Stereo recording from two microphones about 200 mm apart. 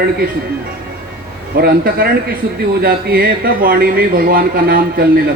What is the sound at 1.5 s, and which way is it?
Speech, 50° right (ahead or behind).